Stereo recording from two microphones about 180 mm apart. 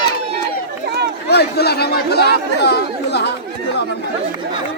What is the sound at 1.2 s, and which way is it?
Speech, 65° left (ahead or behind).